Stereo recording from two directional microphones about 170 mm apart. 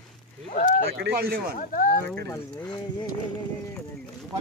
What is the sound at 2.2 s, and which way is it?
Speech, 15° left (ahead or behind).